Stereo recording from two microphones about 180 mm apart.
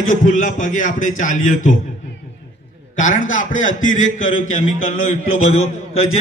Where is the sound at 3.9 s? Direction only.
45° left (ahead or behind).